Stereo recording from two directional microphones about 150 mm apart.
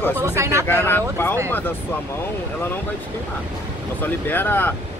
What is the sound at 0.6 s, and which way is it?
Speech, 15° left (ahead or behind).